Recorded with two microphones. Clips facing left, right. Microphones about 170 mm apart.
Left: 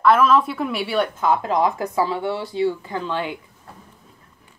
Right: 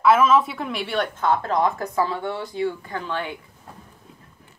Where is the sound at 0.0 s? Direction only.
Centre (ahead or behind); by 3.3 s 20° left (ahead or behind).